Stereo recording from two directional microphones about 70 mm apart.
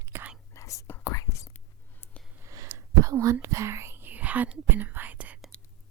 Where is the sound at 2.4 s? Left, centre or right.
Right.